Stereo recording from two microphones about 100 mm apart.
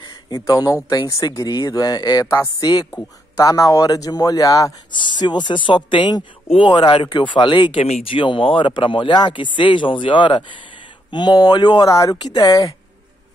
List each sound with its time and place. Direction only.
0.5 s a man's voice: 35° left (ahead or behind)
2.2 s speech: 25° left (ahead or behind)
2.6 s a man's voice: 40° left (ahead or behind)
2.9 s a man's voice: 30° left (ahead or behind); by 7.8 s 50° left (ahead or behind)
7.8 s speech: 65° left (ahead or behind); by 12.7 s 35° left (ahead or behind)